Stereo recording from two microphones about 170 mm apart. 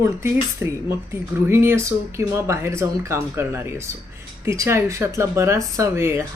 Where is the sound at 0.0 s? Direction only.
15° right (ahead or behind).